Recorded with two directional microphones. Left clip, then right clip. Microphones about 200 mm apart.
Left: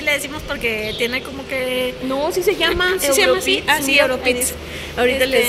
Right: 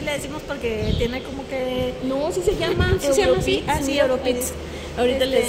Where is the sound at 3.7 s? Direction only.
20° right (ahead or behind).